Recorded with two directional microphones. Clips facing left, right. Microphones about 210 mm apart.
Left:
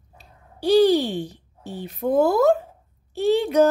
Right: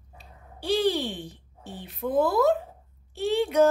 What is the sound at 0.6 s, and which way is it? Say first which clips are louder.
A woman's voice: left 8 dB; 40° left (ahead or behind).